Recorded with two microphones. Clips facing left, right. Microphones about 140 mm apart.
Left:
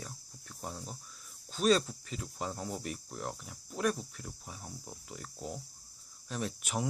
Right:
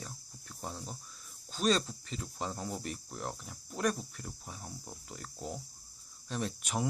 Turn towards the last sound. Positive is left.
turn(degrees=5)  # may be behind; listen again after turning